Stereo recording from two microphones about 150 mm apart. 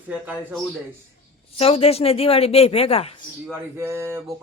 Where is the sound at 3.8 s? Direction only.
15° right (ahead or behind).